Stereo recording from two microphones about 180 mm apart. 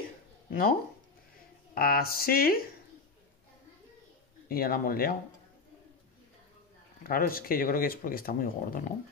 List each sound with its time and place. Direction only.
0.5 s speech: 50° left (ahead or behind)
1.8 s speech: 55° left (ahead or behind)
4.5 s speech: 55° left (ahead or behind)
7.0 s speech: 50° left (ahead or behind)